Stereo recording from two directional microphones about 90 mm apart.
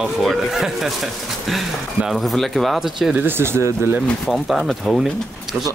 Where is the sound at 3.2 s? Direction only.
25° right (ahead or behind).